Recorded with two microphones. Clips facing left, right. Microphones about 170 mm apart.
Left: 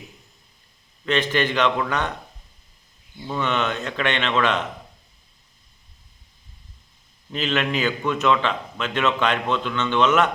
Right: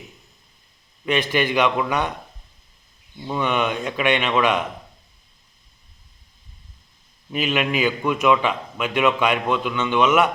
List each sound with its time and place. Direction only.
1.0 s a man's voice: 10° right (ahead or behind)
3.2 s a man's voice: 10° right (ahead or behind)
7.3 s a man's voice: 10° right (ahead or behind)